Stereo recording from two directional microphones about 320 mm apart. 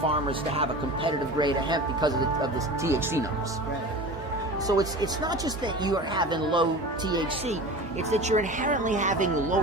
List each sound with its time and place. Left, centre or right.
0.0 s speech: centre
4.6 s speech: centre